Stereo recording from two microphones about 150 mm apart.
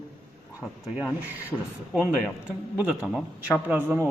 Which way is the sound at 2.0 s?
5° right (ahead or behind).